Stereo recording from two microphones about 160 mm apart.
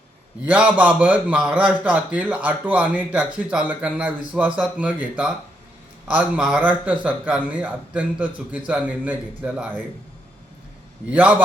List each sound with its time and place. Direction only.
0.4 s a man's voice: 10° right (ahead or behind)
11.1 s a man's voice: 10° right (ahead or behind)